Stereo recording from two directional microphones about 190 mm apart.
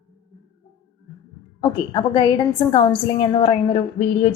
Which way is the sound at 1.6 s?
25° left (ahead or behind).